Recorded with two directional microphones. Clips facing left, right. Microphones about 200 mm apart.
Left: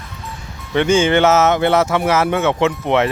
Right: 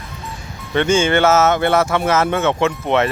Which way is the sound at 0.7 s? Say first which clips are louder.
Left 1 dB; 15° left (ahead or behind).